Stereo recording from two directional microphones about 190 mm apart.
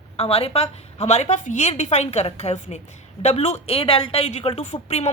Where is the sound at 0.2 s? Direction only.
30° left (ahead or behind).